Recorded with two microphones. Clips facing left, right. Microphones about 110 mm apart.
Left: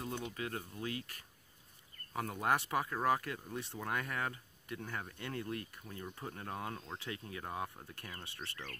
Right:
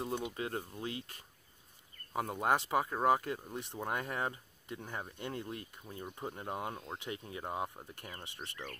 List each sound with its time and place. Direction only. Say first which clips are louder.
0.3 s speech: right 3 dB; 25° right (ahead or behind)